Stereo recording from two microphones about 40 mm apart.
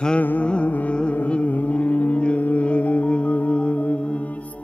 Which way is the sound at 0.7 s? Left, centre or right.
Left.